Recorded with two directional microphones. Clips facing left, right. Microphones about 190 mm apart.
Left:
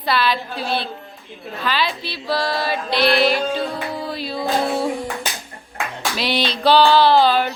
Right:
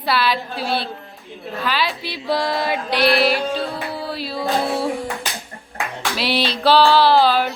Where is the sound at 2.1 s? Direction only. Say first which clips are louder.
Right 1 dB; 15° right (ahead or behind).